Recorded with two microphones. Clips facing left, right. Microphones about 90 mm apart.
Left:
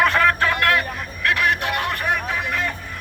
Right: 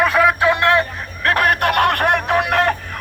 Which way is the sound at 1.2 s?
45° right (ahead or behind).